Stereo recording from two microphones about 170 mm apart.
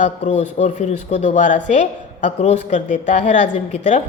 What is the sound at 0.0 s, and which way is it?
A woman's voice, 40° left (ahead or behind).